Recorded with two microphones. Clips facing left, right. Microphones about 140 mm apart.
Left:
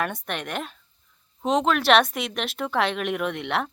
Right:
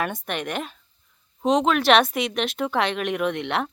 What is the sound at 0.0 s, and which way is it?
Speech, centre (ahead or behind).